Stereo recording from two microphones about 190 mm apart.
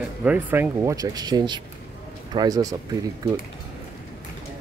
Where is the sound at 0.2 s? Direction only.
10° right (ahead or behind).